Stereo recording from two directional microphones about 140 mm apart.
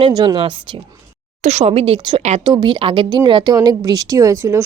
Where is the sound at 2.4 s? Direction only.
35° right (ahead or behind).